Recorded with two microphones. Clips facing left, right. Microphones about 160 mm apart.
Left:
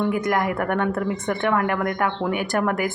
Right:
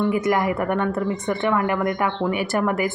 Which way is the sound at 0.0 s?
5° right (ahead or behind).